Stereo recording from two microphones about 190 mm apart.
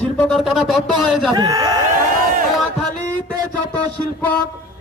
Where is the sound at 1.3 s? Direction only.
20° right (ahead or behind).